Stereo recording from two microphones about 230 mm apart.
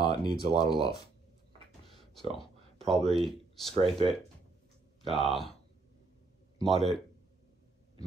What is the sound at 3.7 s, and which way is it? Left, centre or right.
Speech, right.